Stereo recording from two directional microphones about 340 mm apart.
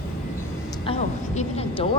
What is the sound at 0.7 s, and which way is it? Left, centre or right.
A woman's voice, centre.